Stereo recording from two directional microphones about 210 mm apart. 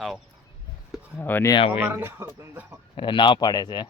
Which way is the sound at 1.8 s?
10° right (ahead or behind).